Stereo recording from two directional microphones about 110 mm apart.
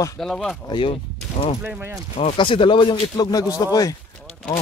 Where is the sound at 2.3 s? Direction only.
50° left (ahead or behind); by 3.9 s 30° left (ahead or behind).